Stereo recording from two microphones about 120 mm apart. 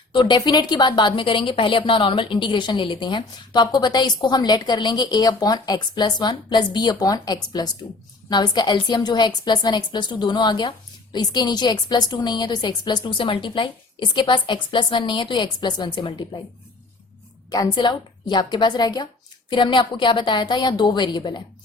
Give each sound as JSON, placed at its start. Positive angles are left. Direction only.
{"t": 0.1, "sound": "a woman's voice", "side_deg": 40}
{"t": 17.7, "sound": "a woman's voice", "side_deg": 40}